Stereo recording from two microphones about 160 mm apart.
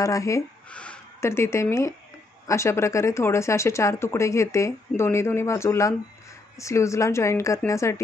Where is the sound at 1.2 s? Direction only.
15° left (ahead or behind).